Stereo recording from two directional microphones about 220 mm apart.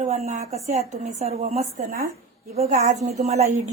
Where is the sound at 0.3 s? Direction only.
30° right (ahead or behind).